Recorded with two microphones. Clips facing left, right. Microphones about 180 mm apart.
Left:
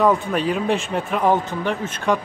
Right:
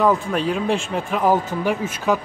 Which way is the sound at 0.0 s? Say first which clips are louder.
Even; centre (ahead or behind).